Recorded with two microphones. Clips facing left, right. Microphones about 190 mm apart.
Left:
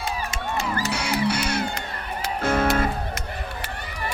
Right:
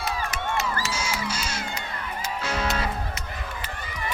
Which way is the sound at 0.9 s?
65° left (ahead or behind).